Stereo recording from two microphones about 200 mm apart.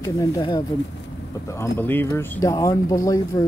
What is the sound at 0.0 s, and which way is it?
Speech, 15° left (ahead or behind).